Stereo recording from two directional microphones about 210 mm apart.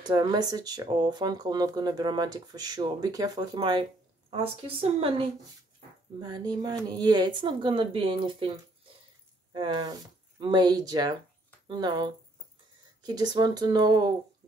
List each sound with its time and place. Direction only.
0.0 s speech: 20° right (ahead or behind)